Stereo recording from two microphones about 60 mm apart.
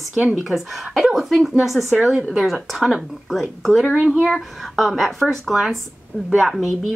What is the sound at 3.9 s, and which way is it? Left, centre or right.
Speech, right.